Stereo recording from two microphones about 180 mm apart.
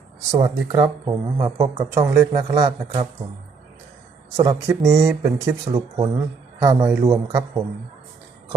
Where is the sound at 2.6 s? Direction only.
35° right (ahead or behind).